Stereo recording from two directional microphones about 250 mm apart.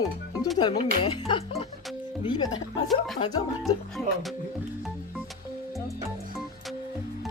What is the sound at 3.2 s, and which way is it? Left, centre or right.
Speech, centre.